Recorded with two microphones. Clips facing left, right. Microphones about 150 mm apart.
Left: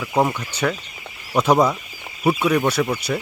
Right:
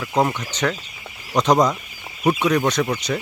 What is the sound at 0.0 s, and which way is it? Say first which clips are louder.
Speech: even; 5° left (ahead or behind).